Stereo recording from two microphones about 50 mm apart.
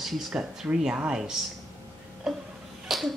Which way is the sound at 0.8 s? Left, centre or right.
Centre.